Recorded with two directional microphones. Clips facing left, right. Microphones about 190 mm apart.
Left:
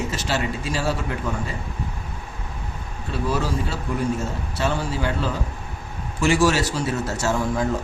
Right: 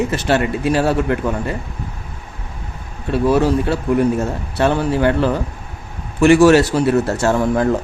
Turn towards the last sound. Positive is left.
turn(degrees=-60)  # may be behind; listen again after turning